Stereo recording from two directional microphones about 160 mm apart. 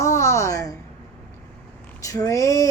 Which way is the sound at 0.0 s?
20° left (ahead or behind).